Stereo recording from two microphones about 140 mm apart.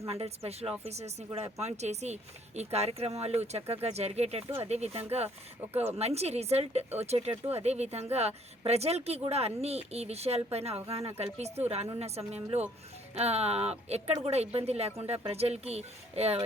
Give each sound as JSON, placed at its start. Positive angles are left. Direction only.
{"t": 0.1, "sound": "speech", "side_deg": -45}